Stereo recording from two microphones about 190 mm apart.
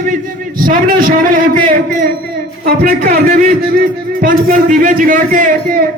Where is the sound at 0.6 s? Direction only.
50° right (ahead or behind).